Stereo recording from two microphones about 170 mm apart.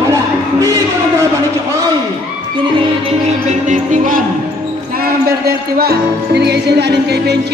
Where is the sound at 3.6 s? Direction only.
50° right (ahead or behind).